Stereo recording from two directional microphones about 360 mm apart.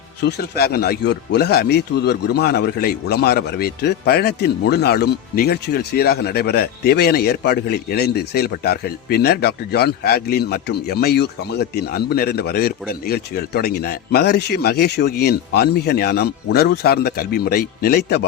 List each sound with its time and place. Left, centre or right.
0.3 s a man's voice: left